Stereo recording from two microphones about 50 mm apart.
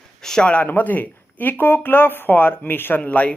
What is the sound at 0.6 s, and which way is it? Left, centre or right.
Speech, left.